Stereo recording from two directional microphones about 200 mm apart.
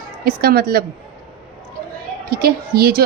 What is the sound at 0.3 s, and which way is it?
Speech, 50° right (ahead or behind).